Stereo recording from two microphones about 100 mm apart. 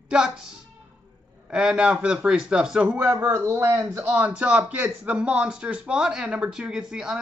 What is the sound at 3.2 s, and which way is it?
Speech, 25° right (ahead or behind).